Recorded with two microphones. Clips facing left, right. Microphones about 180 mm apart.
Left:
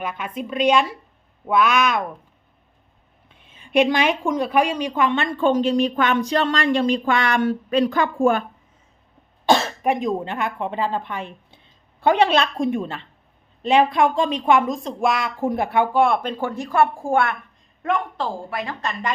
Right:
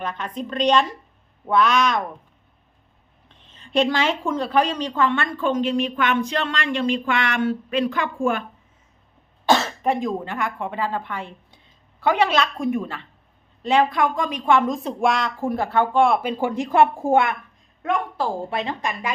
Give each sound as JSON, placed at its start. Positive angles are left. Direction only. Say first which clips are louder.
{"t": 0.0, "sound": "a woman's voice", "louder": "even", "side_deg": 10}
{"t": 3.2, "sound": "a woman's voice", "louder": "even", "side_deg": 10}
{"t": 9.8, "sound": "a woman's voice", "louder": "left 1 dB", "side_deg": 20}
{"t": 14.8, "sound": "speech", "louder": "even", "side_deg": 5}
{"t": 15.4, "sound": "a woman's voice", "louder": "left 1 dB", "side_deg": 20}
{"t": 16.0, "sound": "speech", "louder": "right 1 dB", "side_deg": 0}
{"t": 16.3, "sound": "a woman's voice", "louder": "right 2 dB", "side_deg": -15}
{"t": 17.8, "sound": "speech", "louder": "even", "side_deg": 0}
{"t": 18.5, "sound": "a woman's voice", "louder": "right 2 dB", "side_deg": -20}